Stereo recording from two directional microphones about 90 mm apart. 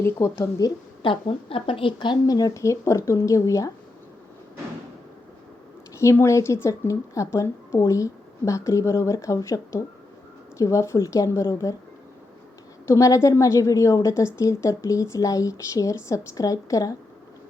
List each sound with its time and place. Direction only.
0.0 s speech: 30° left (ahead or behind)
1.0 s a woman's voice: 80° left; by 2.1 s 65° left (ahead or behind)
2.2 s a woman's voice: 45° left (ahead or behind)
6.1 s a woman's voice: 30° left (ahead or behind)
12.9 s a woman's voice: 35° left (ahead or behind)